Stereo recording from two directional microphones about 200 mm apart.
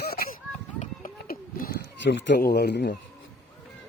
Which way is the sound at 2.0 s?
65° left (ahead or behind).